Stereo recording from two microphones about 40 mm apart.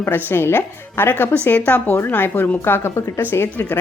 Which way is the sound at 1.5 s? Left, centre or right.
Left.